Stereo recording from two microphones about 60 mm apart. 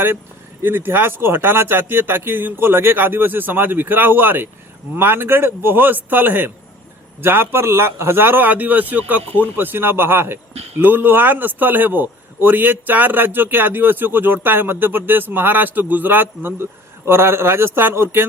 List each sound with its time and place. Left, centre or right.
0.6 s speech: right